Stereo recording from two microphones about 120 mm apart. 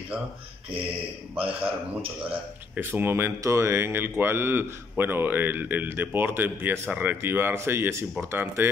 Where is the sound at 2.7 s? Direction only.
20° right (ahead or behind).